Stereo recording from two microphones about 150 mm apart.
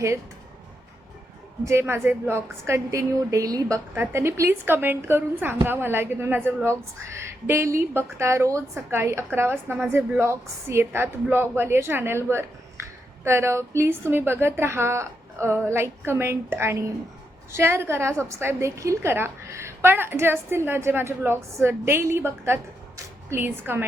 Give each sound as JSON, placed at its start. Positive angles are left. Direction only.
{"t": 1.6, "sound": "a woman's voice", "side_deg": -15}